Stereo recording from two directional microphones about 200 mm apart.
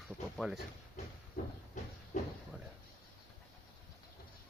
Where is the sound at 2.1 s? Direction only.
40° left (ahead or behind).